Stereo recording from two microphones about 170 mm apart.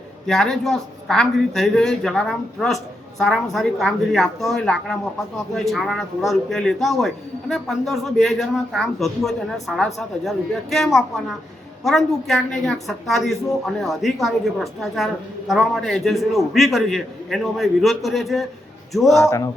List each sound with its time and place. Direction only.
0.3 s a woman's voice: 5° left (ahead or behind)
19.2 s speech: 15° left (ahead or behind)